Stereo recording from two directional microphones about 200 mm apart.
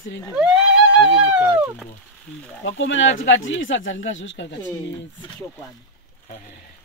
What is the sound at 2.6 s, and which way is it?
Speech, 70° left (ahead or behind).